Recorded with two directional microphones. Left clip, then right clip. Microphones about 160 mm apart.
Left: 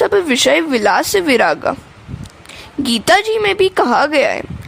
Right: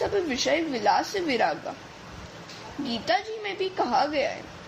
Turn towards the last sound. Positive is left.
turn(degrees=70)  # may be behind; listen again after turning